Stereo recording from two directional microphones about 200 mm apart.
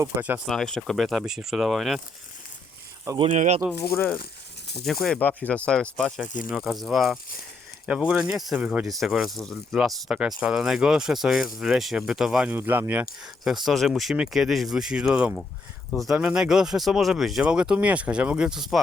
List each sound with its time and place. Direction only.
0.0 s speech: 10° right (ahead or behind)
3.2 s speech: 30° right (ahead or behind)
4.8 s speech: centre (ahead or behind)
6.2 s speech: 40° left (ahead or behind)
6.5 s speech: centre (ahead or behind)